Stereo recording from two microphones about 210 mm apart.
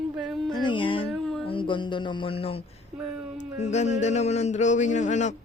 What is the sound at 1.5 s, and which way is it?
Speech, 25° left (ahead or behind).